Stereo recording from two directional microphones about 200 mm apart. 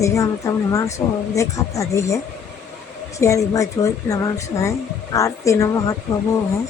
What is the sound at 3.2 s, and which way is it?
Speech, 15° left (ahead or behind).